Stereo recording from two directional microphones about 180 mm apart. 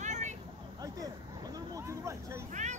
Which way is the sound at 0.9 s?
20° right (ahead or behind).